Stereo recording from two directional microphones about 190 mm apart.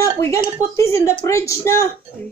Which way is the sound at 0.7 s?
15° left (ahead or behind).